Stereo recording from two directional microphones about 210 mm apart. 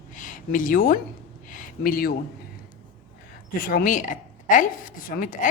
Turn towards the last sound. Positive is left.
turn(degrees=40)  # may be behind; listen again after turning